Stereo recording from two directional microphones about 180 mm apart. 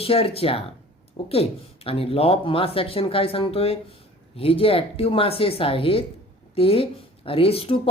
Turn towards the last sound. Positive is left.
turn(degrees=30)  # may be behind; listen again after turning